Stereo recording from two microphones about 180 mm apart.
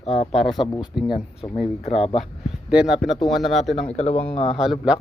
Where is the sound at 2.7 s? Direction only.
5° right (ahead or behind).